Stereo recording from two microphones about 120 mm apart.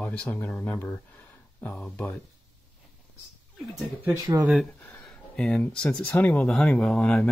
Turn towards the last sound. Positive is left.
turn(degrees=10)  # may be behind; listen again after turning